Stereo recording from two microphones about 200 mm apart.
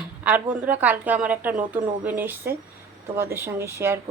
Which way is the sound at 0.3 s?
10° right (ahead or behind).